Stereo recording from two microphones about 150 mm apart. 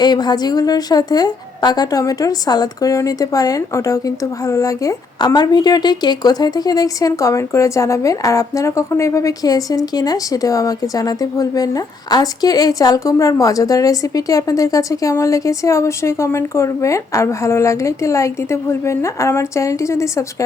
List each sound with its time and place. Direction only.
0.0 s a woman's voice: 30° left (ahead or behind)